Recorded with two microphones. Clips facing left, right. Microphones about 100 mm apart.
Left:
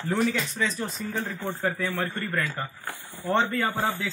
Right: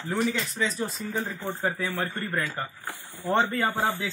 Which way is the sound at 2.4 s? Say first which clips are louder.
Left 1 dB; 5° right (ahead or behind).